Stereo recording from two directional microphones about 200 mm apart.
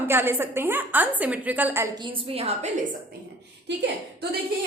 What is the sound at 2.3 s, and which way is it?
Speech, 30° right (ahead or behind).